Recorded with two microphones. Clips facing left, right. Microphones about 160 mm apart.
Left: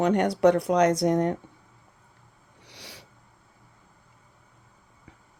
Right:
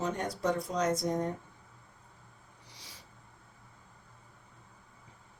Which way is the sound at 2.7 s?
70° left (ahead or behind).